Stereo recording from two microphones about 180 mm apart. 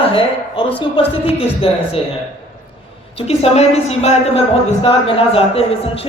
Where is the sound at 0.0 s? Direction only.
30° left (ahead or behind).